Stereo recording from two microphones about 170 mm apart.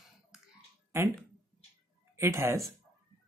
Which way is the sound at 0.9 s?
15° right (ahead or behind).